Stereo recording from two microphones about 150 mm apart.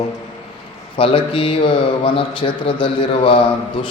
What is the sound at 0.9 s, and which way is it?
A man's voice, 35° left (ahead or behind).